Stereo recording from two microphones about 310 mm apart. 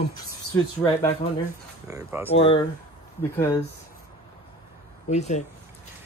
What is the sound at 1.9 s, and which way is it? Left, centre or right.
Speech, centre.